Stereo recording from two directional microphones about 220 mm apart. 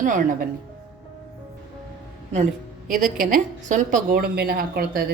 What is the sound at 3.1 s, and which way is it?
A woman's voice, 35° right (ahead or behind).